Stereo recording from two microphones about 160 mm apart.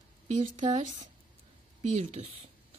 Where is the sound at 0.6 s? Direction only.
50° right (ahead or behind).